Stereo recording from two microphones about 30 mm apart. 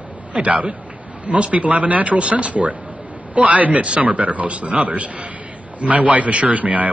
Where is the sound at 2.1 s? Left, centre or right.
Right.